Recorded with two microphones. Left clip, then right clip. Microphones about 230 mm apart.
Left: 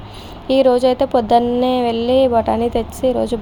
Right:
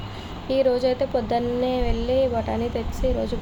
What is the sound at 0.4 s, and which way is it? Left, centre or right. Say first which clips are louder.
A woman's voice: left 8 dB; left.